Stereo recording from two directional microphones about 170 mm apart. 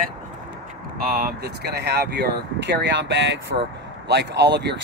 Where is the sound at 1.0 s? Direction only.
60° right (ahead or behind).